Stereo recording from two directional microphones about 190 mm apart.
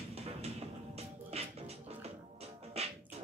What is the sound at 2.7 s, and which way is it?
Music, 35° right (ahead or behind).